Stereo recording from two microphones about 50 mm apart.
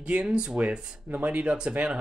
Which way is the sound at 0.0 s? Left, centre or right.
Right.